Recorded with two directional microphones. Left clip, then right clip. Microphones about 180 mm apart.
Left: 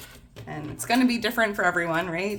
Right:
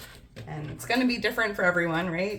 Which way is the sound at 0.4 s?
45° left (ahead or behind).